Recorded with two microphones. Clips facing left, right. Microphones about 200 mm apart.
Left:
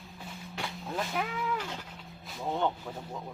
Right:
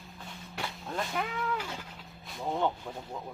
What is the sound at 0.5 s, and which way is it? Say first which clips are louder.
Cat: even; centre (ahead or behind).